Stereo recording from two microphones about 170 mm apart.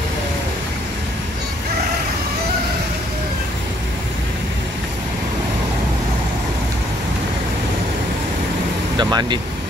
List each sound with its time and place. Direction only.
8.9 s speech: 25° right (ahead or behind)